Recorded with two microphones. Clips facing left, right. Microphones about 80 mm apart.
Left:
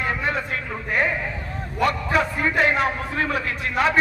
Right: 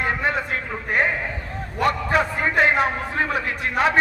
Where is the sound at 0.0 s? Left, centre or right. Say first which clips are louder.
Right 2 dB; right.